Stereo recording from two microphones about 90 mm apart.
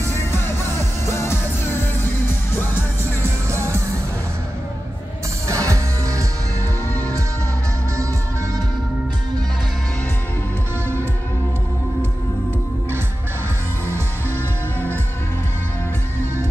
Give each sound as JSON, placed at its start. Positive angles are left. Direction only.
{"t": 0.1, "sound": "music", "side_deg": 30}
{"t": 3.4, "sound": "music", "side_deg": -30}
{"t": 5.5, "sound": "music", "side_deg": -35}